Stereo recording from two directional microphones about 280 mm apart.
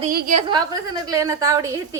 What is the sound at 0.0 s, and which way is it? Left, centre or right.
Speech, right.